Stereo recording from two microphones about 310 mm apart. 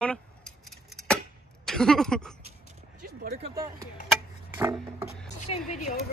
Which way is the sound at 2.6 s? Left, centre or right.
Right.